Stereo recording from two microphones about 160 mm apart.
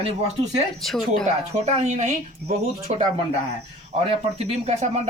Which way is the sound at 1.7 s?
45° right (ahead or behind).